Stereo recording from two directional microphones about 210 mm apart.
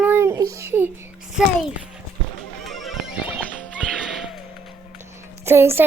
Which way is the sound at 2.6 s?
Centre (ahead or behind).